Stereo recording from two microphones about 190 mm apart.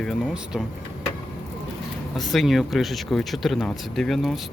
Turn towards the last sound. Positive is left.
turn(degrees=0)  # may be behind; listen again after turning